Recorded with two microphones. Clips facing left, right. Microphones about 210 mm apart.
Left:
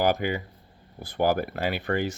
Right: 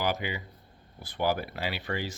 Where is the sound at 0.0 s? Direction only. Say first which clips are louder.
Left 7 dB; 50° left (ahead or behind).